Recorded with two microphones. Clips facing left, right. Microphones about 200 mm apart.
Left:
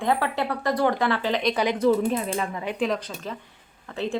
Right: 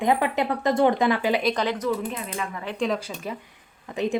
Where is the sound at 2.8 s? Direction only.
5° right (ahead or behind).